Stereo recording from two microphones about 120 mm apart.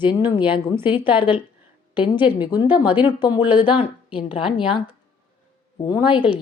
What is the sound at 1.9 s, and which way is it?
Speech, 40° left (ahead or behind).